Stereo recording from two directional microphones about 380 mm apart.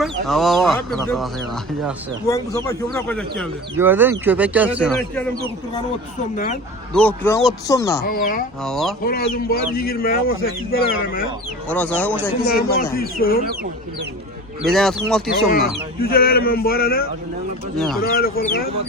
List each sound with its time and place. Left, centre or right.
0.0 s speech: centre
6.3 s speech: left
6.9 s speech: centre
8.0 s speech: left
8.6 s speech: centre
9.0 s speech: left
11.7 s speech: centre
12.5 s speech: left
14.7 s speech: centre
16.0 s speech: left
17.7 s speech: centre
18.1 s speech: left